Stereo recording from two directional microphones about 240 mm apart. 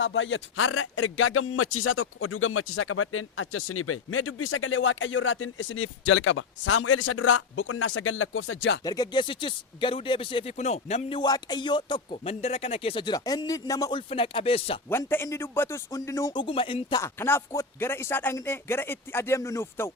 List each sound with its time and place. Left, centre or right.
0.0 s a man's voice: left
8.8 s speech: centre
14.8 s speech: centre
17.0 s speech: centre